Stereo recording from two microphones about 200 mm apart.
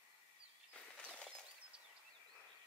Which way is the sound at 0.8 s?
5° left (ahead or behind).